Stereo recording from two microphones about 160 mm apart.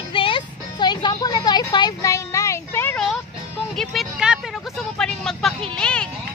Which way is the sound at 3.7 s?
Centre (ahead or behind).